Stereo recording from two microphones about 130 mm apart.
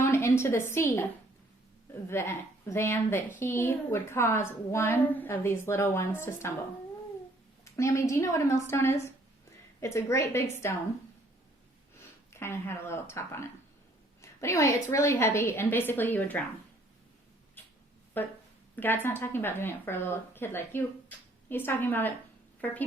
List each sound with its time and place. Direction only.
0.0 s a woman's voice: 20° left (ahead or behind)
7.6 s a woman's voice: 25° left (ahead or behind)
12.3 s a woman's voice: 20° left (ahead or behind)
18.2 s speech: 15° left (ahead or behind)